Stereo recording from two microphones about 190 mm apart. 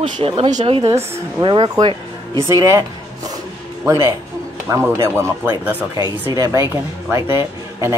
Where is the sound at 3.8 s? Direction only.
15° right (ahead or behind).